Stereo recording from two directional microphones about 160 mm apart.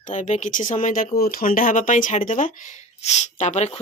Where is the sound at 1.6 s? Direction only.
55° left (ahead or behind).